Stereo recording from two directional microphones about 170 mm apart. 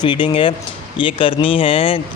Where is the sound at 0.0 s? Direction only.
30° left (ahead or behind).